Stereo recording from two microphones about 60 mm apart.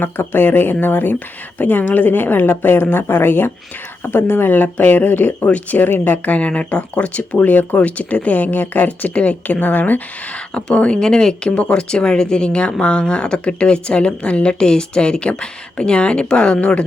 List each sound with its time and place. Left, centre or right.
0.0 s a woman's voice: left
10.5 s a woman's voice: centre